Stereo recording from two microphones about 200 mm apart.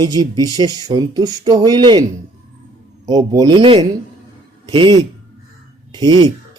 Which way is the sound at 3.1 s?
20° right (ahead or behind).